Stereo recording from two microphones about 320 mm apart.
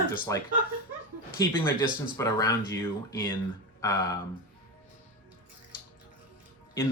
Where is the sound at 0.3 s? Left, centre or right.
Centre.